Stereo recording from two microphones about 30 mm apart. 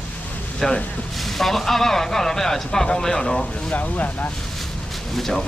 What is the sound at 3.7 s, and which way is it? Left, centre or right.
Speech, left.